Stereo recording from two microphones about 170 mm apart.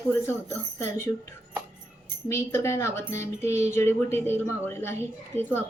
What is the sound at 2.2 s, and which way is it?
A woman's voice, 15° left (ahead or behind).